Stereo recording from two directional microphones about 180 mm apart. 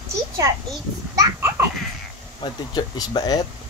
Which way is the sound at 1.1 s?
20° right (ahead or behind).